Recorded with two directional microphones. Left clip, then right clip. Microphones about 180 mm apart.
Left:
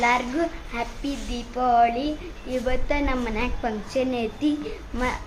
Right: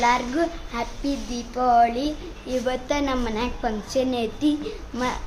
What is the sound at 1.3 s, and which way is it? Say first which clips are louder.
A woman's voice: right 1 dB; centre (ahead or behind).